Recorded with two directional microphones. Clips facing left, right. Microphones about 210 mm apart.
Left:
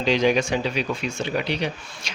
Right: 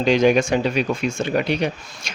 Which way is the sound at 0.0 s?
50° right (ahead or behind).